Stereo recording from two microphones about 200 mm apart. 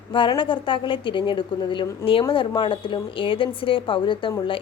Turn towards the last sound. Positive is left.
turn(degrees=25)  # may be behind; listen again after turning